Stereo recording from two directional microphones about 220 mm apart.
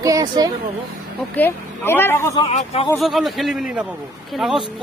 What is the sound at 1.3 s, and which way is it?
Speech, 10° left (ahead or behind).